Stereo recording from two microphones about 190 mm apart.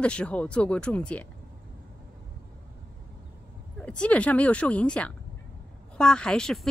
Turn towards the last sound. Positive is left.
turn(degrees=5)  # may be behind; listen again after turning